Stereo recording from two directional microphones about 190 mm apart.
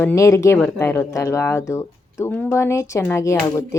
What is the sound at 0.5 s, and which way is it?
Speech, 5° left (ahead or behind).